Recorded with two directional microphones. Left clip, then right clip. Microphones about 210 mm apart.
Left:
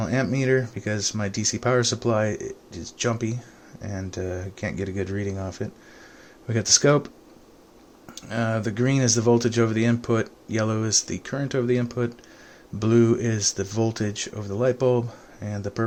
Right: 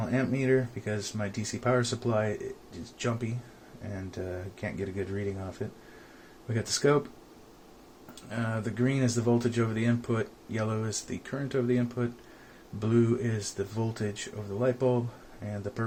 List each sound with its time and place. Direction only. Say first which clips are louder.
0.0 s speech: left 5 dB; 55° left (ahead or behind)
8.1 s speech: left 8 dB; 55° left (ahead or behind)